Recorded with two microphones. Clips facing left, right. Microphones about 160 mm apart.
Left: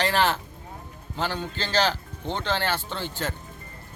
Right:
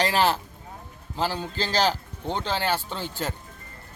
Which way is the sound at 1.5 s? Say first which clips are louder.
Even; 35° right (ahead or behind).